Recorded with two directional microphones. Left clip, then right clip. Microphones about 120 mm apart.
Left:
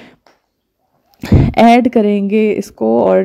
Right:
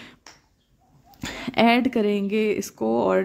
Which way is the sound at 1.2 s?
45° left (ahead or behind).